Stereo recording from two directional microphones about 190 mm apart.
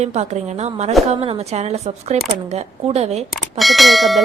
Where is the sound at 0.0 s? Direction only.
35° right (ahead or behind).